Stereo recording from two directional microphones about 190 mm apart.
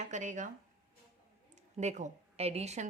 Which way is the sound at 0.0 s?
40° right (ahead or behind).